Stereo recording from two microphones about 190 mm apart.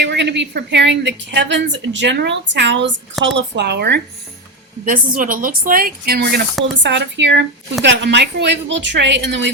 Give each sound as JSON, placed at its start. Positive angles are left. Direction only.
{"t": 0.0, "sound": "a woman's voice", "side_deg": -65}
{"t": 4.9, "sound": "speech", "side_deg": -45}
{"t": 6.8, "sound": "a woman's voice", "side_deg": -70}